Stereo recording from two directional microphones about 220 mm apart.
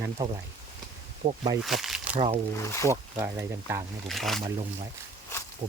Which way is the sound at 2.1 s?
25° right (ahead or behind).